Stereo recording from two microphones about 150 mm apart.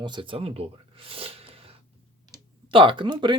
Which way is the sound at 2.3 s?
35° right (ahead or behind).